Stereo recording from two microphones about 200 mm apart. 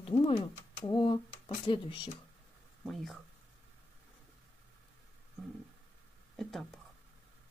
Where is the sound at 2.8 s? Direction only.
Centre (ahead or behind).